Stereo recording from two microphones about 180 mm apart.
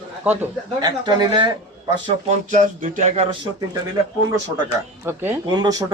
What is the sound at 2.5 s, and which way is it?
Speech, 45° right (ahead or behind).